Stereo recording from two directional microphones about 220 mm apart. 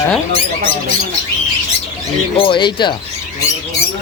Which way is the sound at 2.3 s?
25° left (ahead or behind).